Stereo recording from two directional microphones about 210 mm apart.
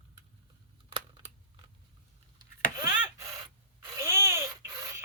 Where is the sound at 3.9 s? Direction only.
10° right (ahead or behind).